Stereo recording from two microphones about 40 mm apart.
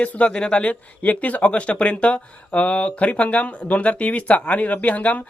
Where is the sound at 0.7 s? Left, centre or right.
Left.